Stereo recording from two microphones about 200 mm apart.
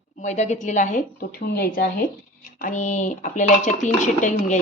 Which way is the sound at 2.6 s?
40° left (ahead or behind).